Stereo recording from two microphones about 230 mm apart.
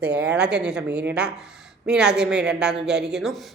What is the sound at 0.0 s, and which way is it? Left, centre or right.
Speech, centre.